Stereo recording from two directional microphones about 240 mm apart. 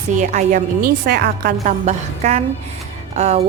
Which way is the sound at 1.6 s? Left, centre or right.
Right.